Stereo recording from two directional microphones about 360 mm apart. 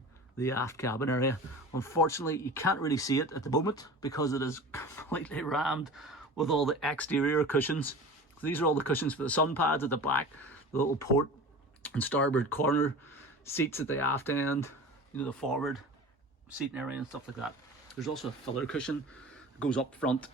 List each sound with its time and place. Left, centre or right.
0.3 s speech: centre